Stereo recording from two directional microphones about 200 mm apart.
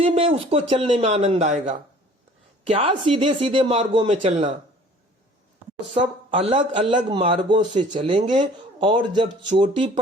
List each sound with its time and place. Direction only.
0.0 s speech: 25° right (ahead or behind)
6.5 s speech: 25° right (ahead or behind)